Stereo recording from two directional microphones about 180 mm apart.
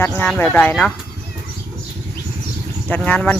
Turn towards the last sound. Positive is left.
turn(degrees=10)  # may be behind; listen again after turning